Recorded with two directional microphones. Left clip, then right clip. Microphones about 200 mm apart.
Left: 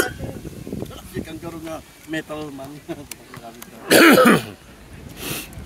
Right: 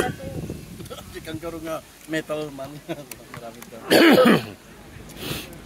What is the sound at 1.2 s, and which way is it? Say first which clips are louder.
Speech: right 4 dB; 35° right (ahead or behind).